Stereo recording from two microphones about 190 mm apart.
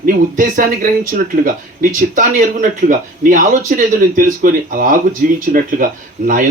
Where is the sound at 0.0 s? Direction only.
45° right (ahead or behind).